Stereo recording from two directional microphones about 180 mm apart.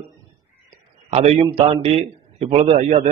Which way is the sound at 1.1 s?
35° right (ahead or behind).